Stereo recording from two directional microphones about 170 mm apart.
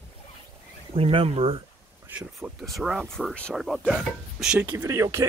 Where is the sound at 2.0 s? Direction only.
15° right (ahead or behind).